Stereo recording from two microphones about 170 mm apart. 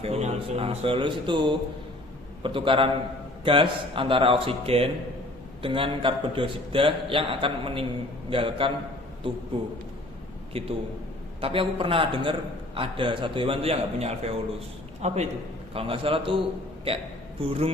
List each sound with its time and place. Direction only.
0.0 s a man's voice: 40° right (ahead or behind)
10.5 s a man's voice: 35° right (ahead or behind)
17.4 s a man's voice: 35° right (ahead or behind)